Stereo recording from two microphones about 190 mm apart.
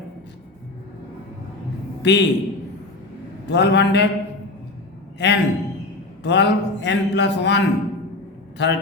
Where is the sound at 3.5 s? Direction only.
65° left (ahead or behind).